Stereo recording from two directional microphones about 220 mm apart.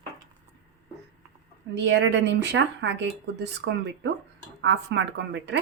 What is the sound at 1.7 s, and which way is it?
Speech, 55° right (ahead or behind).